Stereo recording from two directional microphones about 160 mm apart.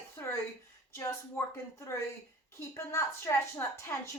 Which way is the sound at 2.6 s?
15° left (ahead or behind).